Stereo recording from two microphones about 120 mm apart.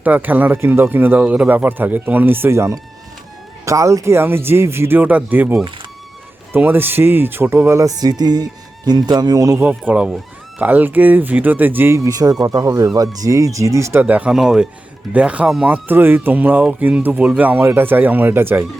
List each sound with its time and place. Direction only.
0.0 s speech: 15° right (ahead or behind)
9.6 s speech: 10° right (ahead or behind)
14.0 s speech: 10° right (ahead or behind)